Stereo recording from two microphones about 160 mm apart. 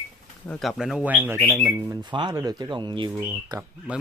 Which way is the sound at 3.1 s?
10° right (ahead or behind).